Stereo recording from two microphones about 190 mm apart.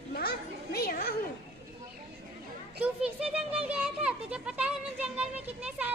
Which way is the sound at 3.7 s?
5° right (ahead or behind).